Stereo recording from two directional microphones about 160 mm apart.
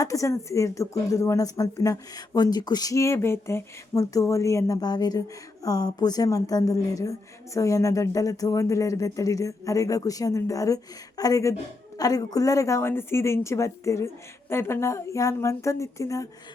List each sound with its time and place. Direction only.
0.0 s speech: 20° left (ahead or behind)